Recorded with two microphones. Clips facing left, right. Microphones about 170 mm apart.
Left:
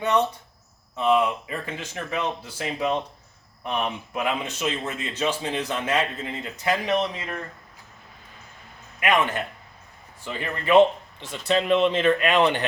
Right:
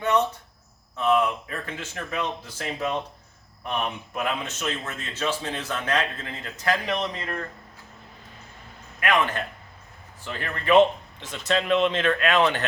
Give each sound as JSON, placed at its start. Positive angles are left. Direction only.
{"t": 0.0, "sound": "a man's voice", "side_deg": 10}
{"t": 9.0, "sound": "a man's voice", "side_deg": 15}